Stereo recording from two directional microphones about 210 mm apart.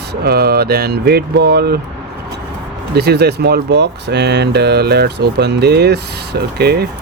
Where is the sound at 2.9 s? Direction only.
50° right (ahead or behind).